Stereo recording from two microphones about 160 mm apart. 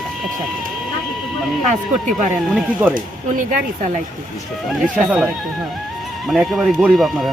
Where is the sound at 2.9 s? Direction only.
55° right (ahead or behind).